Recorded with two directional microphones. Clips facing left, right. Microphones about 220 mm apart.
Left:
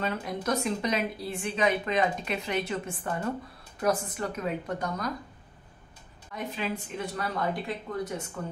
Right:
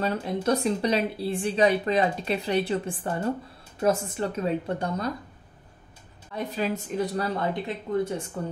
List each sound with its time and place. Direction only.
0.0 s speech: 30° right (ahead or behind)
6.3 s speech: 40° right (ahead or behind)